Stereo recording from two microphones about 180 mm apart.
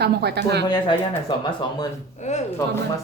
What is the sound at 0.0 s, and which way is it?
Speech, 65° right (ahead or behind).